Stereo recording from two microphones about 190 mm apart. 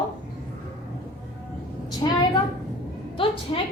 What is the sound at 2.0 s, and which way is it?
A woman's voice, 25° left (ahead or behind).